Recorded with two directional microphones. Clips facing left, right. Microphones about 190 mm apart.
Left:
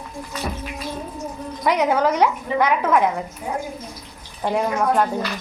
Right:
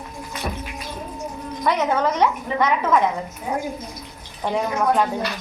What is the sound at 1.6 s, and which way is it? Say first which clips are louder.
A woman's voice: left 2 dB; 15° left (ahead or behind).